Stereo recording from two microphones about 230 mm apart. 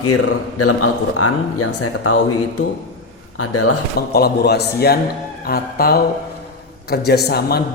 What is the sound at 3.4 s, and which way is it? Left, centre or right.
Speech, left.